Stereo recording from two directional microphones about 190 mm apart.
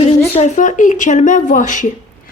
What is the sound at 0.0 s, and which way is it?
Speech, 35° left (ahead or behind).